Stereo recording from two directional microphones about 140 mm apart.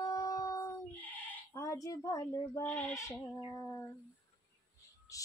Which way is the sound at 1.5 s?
20° left (ahead or behind).